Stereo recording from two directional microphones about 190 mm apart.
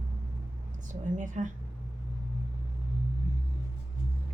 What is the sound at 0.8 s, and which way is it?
Speech, 40° right (ahead or behind).